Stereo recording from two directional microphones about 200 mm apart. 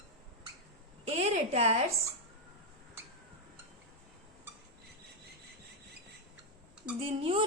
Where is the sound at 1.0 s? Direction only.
30° right (ahead or behind).